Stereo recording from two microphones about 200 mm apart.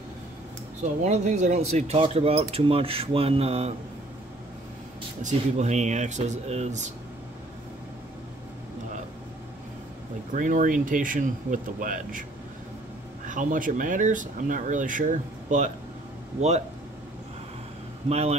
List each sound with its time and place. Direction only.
1.0 s speech: 35° right (ahead or behind)
5.2 s speech: 35° right (ahead or behind)
10.3 s speech: 40° right (ahead or behind)
13.3 s speech: 40° right (ahead or behind)
18.0 s speech: 30° right (ahead or behind)